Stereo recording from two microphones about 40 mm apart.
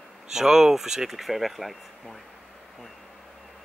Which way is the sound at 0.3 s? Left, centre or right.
Centre.